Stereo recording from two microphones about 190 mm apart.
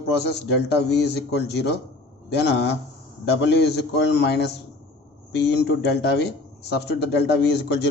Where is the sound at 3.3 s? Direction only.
60° left (ahead or behind).